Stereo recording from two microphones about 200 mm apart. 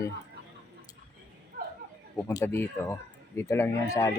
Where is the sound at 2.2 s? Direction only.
15° left (ahead or behind).